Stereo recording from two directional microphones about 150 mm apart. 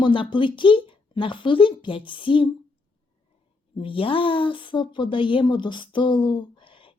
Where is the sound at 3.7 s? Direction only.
35° left (ahead or behind).